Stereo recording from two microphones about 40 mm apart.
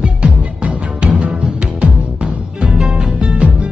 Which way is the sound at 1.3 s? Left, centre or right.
Right.